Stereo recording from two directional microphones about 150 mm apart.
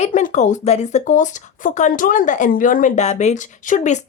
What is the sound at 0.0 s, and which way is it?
Speech, 60° left (ahead or behind).